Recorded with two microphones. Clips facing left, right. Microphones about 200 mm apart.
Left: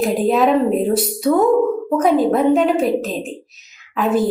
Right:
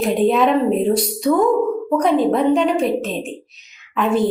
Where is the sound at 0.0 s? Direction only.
Centre (ahead or behind).